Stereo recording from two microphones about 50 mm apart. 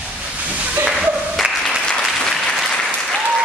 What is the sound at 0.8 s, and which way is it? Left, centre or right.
Music, centre.